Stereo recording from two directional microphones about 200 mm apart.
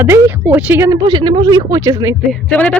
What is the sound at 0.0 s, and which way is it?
Speech, 10° right (ahead or behind).